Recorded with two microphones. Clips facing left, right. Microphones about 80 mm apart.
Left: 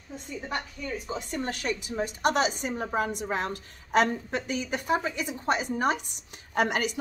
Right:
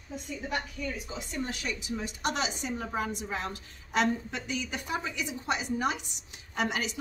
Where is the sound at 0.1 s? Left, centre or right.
Left.